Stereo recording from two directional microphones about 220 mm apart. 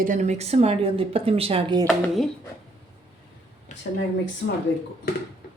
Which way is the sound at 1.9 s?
Centre (ahead or behind).